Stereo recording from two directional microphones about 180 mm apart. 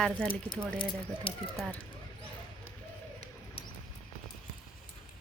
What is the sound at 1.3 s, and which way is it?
Speech, 30° left (ahead or behind).